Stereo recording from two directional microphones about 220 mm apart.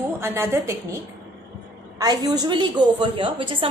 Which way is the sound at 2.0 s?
15° right (ahead or behind).